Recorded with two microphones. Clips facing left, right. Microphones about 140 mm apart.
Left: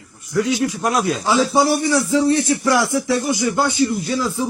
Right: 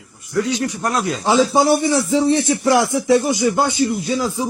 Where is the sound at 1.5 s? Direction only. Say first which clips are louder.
Right 1 dB; 25° right (ahead or behind).